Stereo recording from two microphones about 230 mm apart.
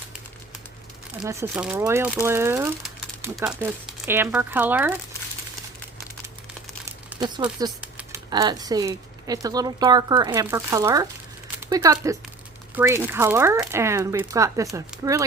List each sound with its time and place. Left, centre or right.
1.2 s speech: centre
7.2 s speech: centre
7.8 s typing: centre
8.3 s speech: centre
11.5 s a sound: centre
12.7 s speech: centre